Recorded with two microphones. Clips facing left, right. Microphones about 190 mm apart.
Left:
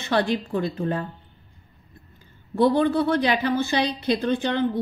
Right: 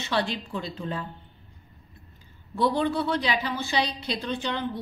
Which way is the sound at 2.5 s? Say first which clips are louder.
Left 5 dB; 55° left (ahead or behind).